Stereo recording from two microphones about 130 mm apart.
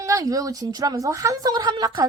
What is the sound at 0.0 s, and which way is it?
A woman's voice, 25° right (ahead or behind).